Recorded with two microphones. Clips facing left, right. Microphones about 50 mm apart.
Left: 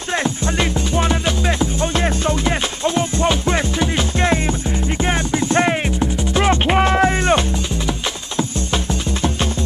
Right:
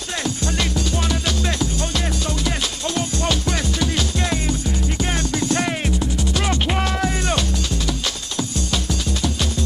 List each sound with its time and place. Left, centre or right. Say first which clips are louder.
0.2 s music: left 1 dB; left